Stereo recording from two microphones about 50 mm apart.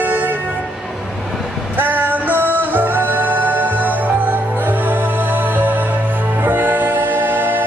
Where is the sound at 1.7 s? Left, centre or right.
Right.